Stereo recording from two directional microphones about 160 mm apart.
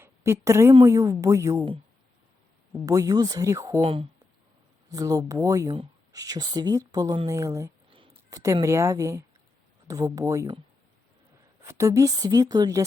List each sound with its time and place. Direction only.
0.0 s a woman's voice: 15° right (ahead or behind)
2.8 s speech: 20° right (ahead or behind)
3.8 s speech: 35° right (ahead or behind)
4.9 s speech: 20° right (ahead or behind)
11.7 s speech: 20° right (ahead or behind)